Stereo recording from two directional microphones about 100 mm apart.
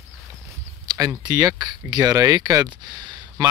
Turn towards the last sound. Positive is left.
turn(degrees=-45)  # may be behind; listen again after turning